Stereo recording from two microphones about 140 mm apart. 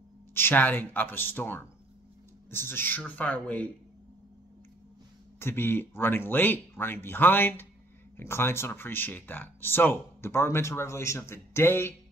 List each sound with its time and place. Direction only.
0.3 s speech: 15° left (ahead or behind)
5.4 s speech: 15° left (ahead or behind)